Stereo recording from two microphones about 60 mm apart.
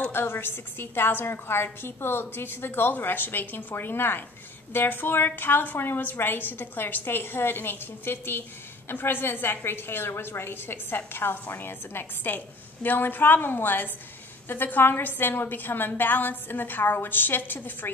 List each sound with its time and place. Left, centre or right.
0.1 s a woman's voice: left